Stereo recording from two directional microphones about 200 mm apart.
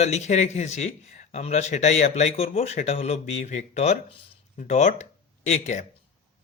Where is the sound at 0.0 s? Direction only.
35° left (ahead or behind).